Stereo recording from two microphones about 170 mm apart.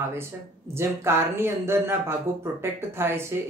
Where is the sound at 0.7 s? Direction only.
15° right (ahead or behind).